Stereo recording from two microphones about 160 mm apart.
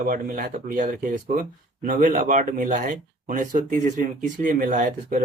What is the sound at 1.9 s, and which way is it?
Speech, 60° right (ahead or behind).